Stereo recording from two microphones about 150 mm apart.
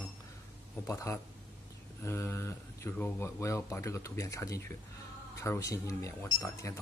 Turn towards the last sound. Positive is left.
turn(degrees=20)  # may be behind; listen again after turning